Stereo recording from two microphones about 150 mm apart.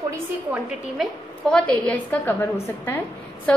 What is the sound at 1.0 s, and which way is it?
A woman's voice, 5° left (ahead or behind).